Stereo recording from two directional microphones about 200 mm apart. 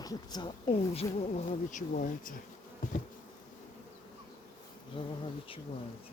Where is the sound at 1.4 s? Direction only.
40° left (ahead or behind).